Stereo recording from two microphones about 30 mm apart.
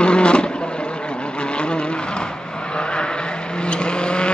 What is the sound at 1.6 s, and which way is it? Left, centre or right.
Vehicle, left.